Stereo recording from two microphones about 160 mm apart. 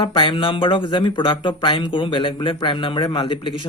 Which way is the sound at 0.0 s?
30° left (ahead or behind).